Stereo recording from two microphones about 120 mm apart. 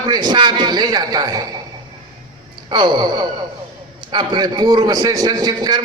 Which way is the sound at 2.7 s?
40° right (ahead or behind).